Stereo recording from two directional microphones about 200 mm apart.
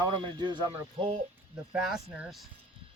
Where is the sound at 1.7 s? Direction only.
5° right (ahead or behind).